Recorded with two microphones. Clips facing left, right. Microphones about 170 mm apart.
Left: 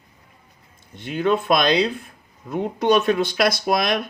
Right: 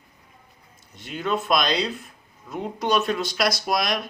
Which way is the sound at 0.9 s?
55° left (ahead or behind).